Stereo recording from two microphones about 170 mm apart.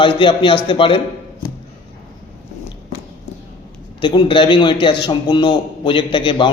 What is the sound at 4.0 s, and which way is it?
A man's voice, 30° left (ahead or behind).